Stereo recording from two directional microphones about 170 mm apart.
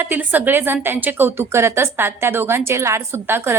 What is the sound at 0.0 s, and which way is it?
A woman's voice, 10° right (ahead or behind).